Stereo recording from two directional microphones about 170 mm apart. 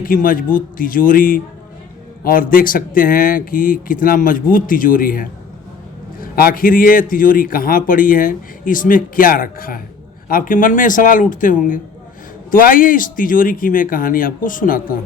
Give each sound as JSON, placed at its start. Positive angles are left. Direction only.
{"t": 0.0, "sound": "a man's voice", "side_deg": 55}